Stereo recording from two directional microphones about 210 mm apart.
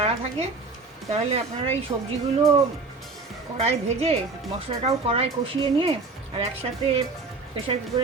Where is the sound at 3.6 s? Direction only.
30° right (ahead or behind).